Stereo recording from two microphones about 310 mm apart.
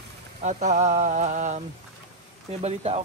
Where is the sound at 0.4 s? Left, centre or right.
Right.